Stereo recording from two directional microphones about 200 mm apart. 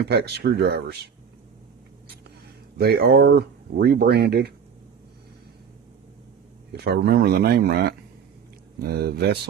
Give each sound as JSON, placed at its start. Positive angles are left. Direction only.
{"t": 0.0, "sound": "speech", "side_deg": -55}
{"t": 2.7, "sound": "speech", "side_deg": -50}
{"t": 6.7, "sound": "speech", "side_deg": -55}